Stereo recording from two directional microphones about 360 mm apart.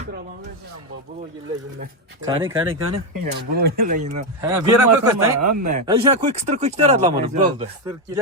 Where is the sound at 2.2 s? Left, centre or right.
Centre.